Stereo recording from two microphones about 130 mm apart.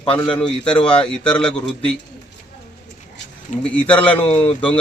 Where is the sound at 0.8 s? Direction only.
10° left (ahead or behind).